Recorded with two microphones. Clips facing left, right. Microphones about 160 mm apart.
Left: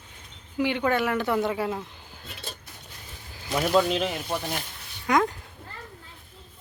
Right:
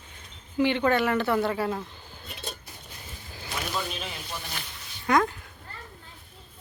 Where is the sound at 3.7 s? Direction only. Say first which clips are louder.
Left 13 dB; 75° left (ahead or behind).